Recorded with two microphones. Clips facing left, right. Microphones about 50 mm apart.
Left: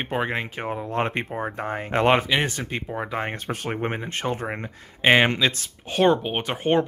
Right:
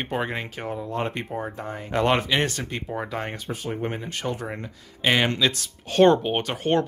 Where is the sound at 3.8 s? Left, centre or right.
Left.